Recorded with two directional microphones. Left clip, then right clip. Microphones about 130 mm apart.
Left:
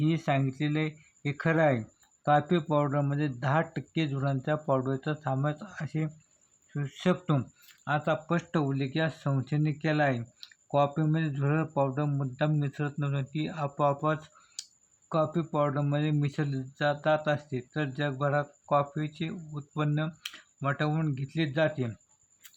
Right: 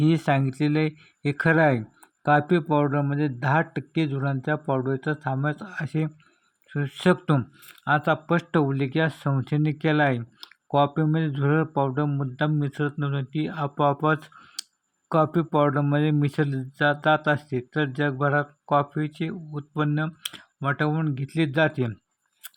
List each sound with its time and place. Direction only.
0.0 s speech: 35° right (ahead or behind)